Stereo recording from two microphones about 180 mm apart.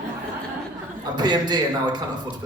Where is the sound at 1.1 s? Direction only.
25° right (ahead or behind).